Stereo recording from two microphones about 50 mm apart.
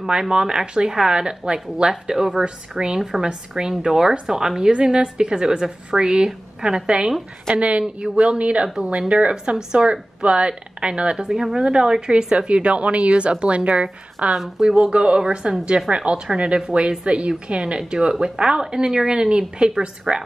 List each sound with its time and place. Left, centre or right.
0.0 s a woman's voice: centre
3.0 s a woman's voice: centre
3.3 s a woman's voice: centre
7.8 s a woman's voice: centre
8.2 s speech: right
14.3 s a woman's voice: centre
14.8 s a woman's voice: right